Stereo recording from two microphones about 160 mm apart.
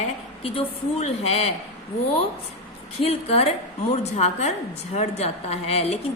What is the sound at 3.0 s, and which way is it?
A woman's voice, 40° left (ahead or behind).